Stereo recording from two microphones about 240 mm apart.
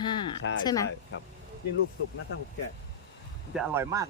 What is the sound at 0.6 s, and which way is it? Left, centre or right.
Speech, centre.